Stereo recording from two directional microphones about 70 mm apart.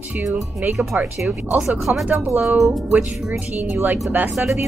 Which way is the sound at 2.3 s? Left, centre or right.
Right.